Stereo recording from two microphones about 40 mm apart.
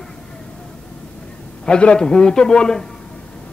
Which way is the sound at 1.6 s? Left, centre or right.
Left.